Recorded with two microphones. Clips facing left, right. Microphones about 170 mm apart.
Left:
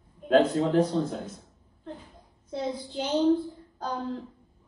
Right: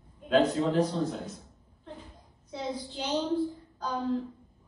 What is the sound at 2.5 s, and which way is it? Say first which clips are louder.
Speech: left 3 dB; 50° left (ahead or behind).